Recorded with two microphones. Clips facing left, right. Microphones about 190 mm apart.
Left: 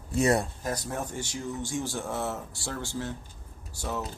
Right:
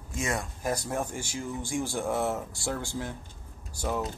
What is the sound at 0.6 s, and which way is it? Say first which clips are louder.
Speech: right 2 dB; 10° right (ahead or behind).